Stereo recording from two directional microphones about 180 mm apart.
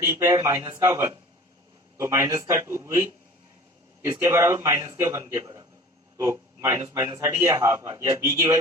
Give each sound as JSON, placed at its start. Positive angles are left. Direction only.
{"t": 0.0, "sound": "a man's voice", "side_deg": -15}